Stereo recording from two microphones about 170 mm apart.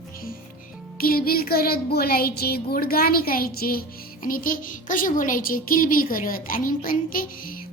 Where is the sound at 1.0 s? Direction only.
60° left (ahead or behind).